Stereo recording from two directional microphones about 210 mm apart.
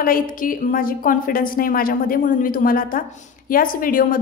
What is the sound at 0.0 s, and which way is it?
A woman's voice, 40° left (ahead or behind).